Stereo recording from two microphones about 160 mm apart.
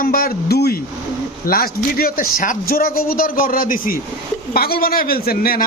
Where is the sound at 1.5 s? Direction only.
65° left (ahead or behind).